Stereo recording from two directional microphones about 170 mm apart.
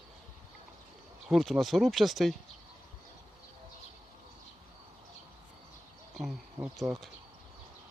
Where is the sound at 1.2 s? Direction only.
Centre (ahead or behind).